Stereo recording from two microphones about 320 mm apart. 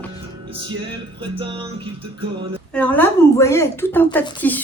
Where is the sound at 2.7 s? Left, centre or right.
Centre.